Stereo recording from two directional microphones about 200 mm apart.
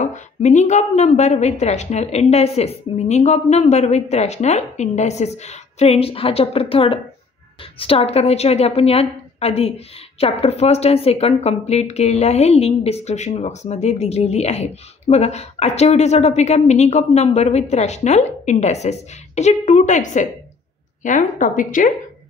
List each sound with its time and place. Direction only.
0.0 s speech: 35° left (ahead or behind)